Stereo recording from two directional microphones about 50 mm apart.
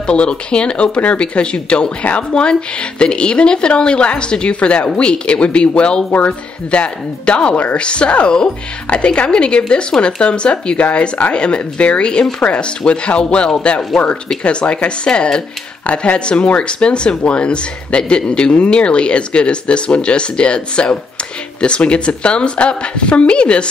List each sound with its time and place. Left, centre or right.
0.0 s speech: centre